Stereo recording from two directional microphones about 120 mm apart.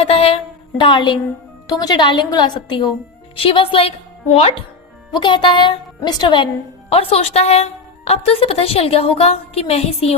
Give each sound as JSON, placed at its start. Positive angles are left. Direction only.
{"t": 0.0, "sound": "a sound", "side_deg": 55}
{"t": 0.8, "sound": "a woman's voice", "side_deg": 40}
{"t": 5.1, "sound": "a woman's voice", "side_deg": 40}
{"t": 6.9, "sound": "a woman's voice", "side_deg": 55}